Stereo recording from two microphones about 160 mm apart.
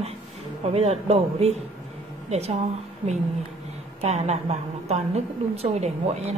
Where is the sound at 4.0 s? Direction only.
40° right (ahead or behind).